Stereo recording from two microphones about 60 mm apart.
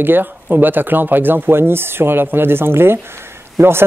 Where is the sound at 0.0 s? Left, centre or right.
Right.